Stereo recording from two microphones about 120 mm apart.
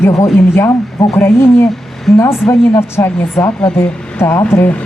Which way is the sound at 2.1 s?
Centre (ahead or behind).